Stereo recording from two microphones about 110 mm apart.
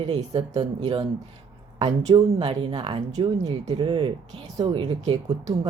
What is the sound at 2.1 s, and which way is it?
Speech, 50° right (ahead or behind).